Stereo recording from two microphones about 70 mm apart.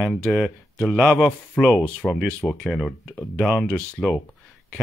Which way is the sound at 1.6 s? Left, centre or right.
Centre.